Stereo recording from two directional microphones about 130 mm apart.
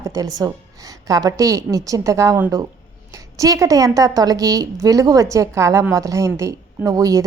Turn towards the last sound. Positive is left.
turn(degrees=-25)  # may be behind; listen again after turning